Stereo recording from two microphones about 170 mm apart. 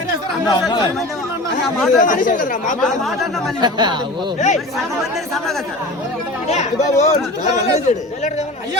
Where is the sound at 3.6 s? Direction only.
25° right (ahead or behind).